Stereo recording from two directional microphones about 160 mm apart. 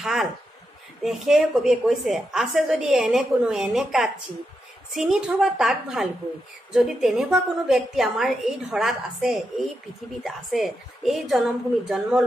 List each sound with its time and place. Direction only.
0.0 s a woman's voice: centre (ahead or behind)